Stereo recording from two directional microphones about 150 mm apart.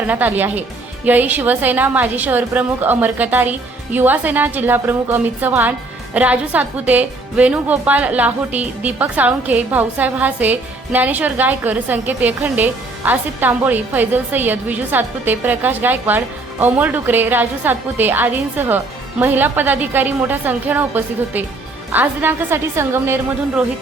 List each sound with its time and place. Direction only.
0.1 s a woman's voice: 10° right (ahead or behind)